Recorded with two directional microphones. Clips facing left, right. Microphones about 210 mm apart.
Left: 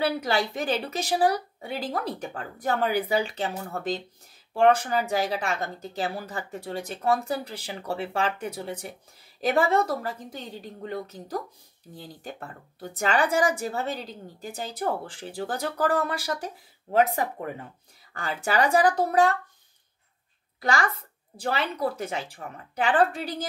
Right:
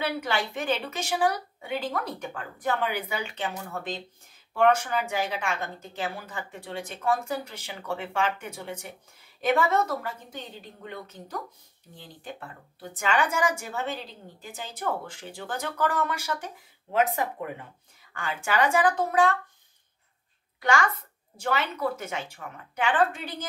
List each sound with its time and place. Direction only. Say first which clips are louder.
0.0 s speech: left 3 dB; 35° left (ahead or behind)
20.6 s speech: right 1 dB; 35° left (ahead or behind)